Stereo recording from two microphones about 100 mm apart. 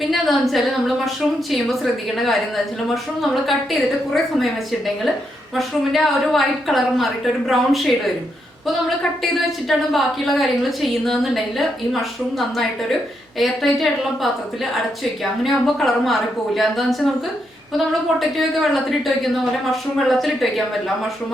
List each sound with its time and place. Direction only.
0.1 s a woman's voice: centre (ahead or behind)
5.5 s a woman's voice: centre (ahead or behind)
9.6 s a woman's voice: centre (ahead or behind)
18.2 s a woman's voice: centre (ahead or behind)